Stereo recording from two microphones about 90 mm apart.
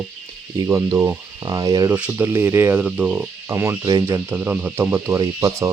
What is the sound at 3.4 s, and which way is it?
Speech, 30° right (ahead or behind).